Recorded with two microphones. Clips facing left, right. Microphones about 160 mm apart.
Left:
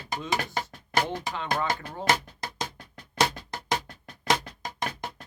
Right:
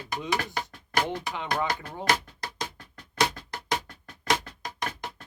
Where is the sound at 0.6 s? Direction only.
25° left (ahead or behind).